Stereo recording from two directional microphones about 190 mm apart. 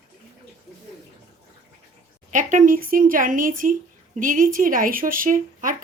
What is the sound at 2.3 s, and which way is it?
Speech, 40° right (ahead or behind).